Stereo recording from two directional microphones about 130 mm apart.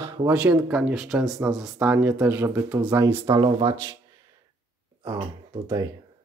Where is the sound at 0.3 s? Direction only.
10° right (ahead or behind).